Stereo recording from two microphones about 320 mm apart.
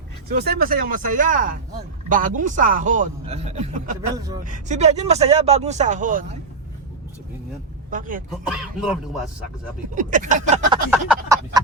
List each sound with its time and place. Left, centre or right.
0.3 s speech: right
7.9 s speech: right
8.3 s speech: centre
9.8 s speech: right
10.9 s a sound: centre